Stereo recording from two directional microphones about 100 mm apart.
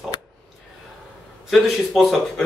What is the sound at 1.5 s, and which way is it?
Speech, centre (ahead or behind).